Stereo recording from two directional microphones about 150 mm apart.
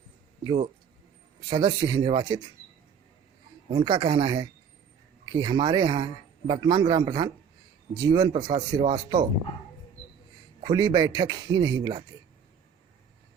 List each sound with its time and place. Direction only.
1.5 s speech: 30° right (ahead or behind)
3.7 s speech: 30° right (ahead or behind)
10.6 s a man's voice: 30° right (ahead or behind)